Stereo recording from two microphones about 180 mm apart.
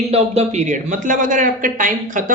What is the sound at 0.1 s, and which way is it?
A man's voice, 35° right (ahead or behind).